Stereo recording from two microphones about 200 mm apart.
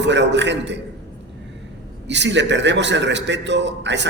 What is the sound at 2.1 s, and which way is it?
Music, 60° right (ahead or behind).